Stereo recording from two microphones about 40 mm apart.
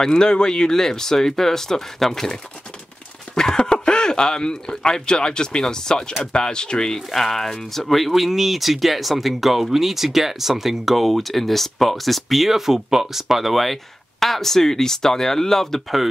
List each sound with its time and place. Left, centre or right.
0.0 s speech: centre
3.3 s speech: centre
7.8 s speech: centre